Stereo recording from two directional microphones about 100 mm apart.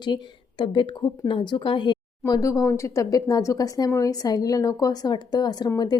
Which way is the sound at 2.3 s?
35° left (ahead or behind).